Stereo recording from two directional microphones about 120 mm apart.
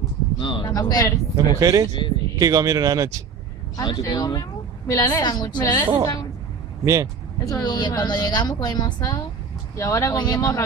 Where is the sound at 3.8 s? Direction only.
40° left (ahead or behind).